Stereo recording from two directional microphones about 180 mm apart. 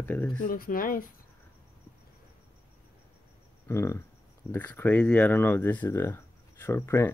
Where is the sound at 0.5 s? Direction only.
50° left (ahead or behind).